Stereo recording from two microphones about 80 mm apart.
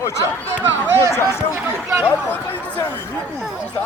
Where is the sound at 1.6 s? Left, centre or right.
Right.